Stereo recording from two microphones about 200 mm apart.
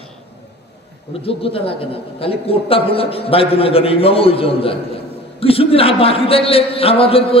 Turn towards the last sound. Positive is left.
turn(degrees=30)  # may be behind; listen again after turning